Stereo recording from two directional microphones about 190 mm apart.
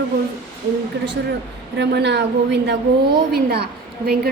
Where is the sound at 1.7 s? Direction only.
65° right (ahead or behind).